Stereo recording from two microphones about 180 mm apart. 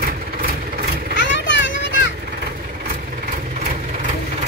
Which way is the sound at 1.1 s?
75° left (ahead or behind).